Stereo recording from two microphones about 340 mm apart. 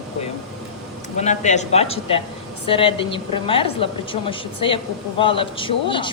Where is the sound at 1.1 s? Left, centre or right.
Left.